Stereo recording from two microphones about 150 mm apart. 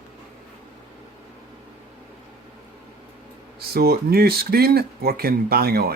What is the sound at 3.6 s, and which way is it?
Speech, 90° right.